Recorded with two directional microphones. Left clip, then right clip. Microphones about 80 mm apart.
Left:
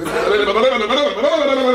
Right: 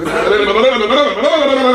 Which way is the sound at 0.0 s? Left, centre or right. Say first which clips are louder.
Right 3 dB; left.